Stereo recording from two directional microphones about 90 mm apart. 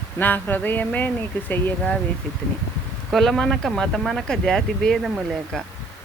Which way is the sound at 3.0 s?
5° left (ahead or behind).